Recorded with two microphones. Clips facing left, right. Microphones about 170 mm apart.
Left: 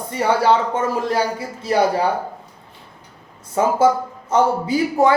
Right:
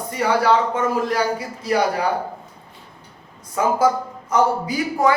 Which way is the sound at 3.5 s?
25° left (ahead or behind).